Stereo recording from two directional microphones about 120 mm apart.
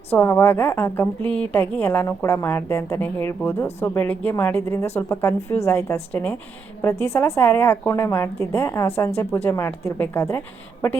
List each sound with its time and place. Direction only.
0.1 s a woman's voice: 20° left (ahead or behind)